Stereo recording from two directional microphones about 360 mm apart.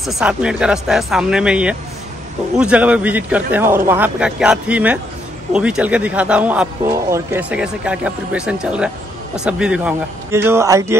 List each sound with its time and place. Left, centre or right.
0.0 s a man's voice: centre